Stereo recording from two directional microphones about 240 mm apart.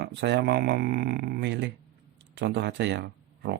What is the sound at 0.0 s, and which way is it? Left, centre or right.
Speech, right.